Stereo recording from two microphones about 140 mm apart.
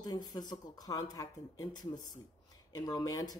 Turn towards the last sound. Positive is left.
turn(degrees=25)  # may be behind; listen again after turning